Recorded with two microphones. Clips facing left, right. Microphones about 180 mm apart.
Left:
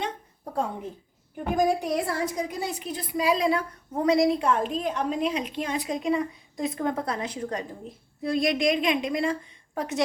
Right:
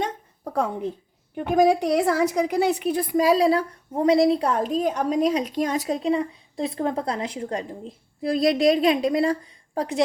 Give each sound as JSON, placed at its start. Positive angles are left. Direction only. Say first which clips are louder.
{"t": 0.5, "sound": "a woman's voice", "louder": "right 5 dB", "side_deg": -80}